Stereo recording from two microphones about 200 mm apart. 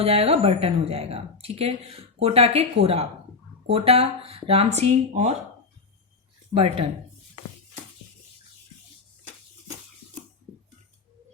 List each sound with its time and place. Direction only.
0.0 s speech: 30° right (ahead or behind)
6.5 s speech: 25° right (ahead or behind)